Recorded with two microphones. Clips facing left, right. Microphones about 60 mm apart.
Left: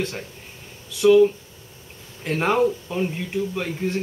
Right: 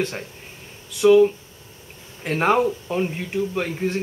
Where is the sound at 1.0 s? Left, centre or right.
Centre.